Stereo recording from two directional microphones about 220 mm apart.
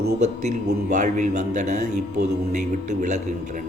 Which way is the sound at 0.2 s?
35° right (ahead or behind).